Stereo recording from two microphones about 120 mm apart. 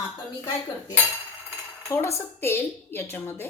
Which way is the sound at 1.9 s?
25° left (ahead or behind).